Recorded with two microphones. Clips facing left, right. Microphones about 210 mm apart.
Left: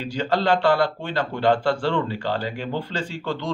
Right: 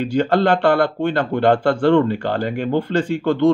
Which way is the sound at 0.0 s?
55° right (ahead or behind).